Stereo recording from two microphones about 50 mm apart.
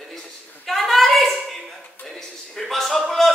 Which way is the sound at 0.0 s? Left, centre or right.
Centre.